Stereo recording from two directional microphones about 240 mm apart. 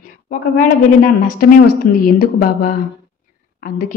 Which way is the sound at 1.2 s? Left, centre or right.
Left.